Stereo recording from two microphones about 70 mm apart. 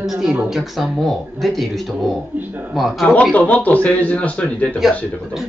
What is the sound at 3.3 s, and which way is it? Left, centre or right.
A man's voice, left.